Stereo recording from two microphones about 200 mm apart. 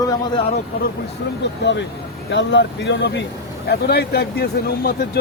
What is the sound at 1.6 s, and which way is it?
Speech, 60° left (ahead or behind).